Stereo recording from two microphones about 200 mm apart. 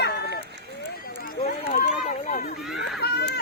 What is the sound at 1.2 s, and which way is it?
Speech, 40° left (ahead or behind).